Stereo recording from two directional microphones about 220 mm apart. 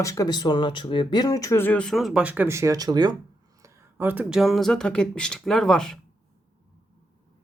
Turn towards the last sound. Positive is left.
turn(degrees=5)  # may be behind; listen again after turning